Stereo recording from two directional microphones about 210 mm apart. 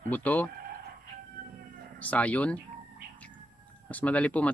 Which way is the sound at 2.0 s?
5° left (ahead or behind).